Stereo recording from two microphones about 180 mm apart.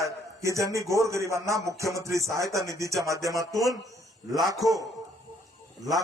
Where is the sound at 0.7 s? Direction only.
15° right (ahead or behind).